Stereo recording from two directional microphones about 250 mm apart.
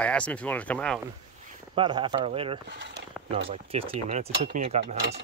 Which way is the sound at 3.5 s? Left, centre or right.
Right.